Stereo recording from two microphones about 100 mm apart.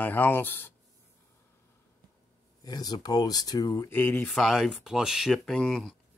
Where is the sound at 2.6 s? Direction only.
40° left (ahead or behind).